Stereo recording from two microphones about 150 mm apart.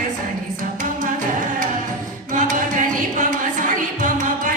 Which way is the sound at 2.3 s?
60° right (ahead or behind).